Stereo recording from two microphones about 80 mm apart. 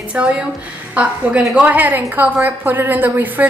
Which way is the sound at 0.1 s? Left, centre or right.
Centre.